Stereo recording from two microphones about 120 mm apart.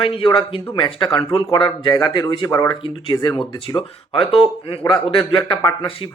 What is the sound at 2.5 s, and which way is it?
Speech, 30° left (ahead or behind).